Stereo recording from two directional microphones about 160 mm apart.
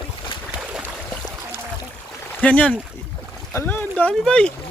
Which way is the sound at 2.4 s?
10° left (ahead or behind).